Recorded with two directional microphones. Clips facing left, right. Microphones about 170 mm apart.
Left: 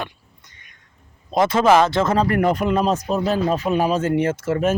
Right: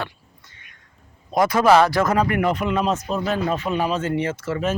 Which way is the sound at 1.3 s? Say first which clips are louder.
Even; 25° left (ahead or behind).